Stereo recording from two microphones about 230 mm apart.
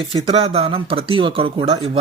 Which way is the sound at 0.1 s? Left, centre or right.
Right.